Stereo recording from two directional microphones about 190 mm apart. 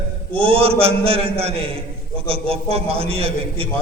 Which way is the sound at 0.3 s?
30° right (ahead or behind).